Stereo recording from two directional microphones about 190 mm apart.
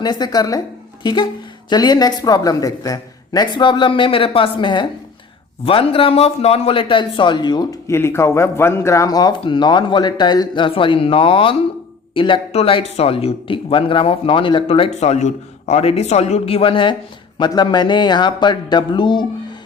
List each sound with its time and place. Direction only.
0.0 s a man's voice: 20° left (ahead or behind)